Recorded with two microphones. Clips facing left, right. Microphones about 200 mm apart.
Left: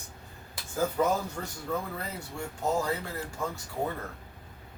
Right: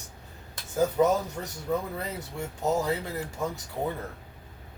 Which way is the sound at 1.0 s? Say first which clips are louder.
Right 4 dB; 15° right (ahead or behind).